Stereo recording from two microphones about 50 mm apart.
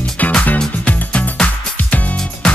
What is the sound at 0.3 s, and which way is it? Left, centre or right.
Music, left.